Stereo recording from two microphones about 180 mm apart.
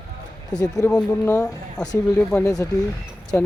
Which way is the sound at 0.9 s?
5° left (ahead or behind).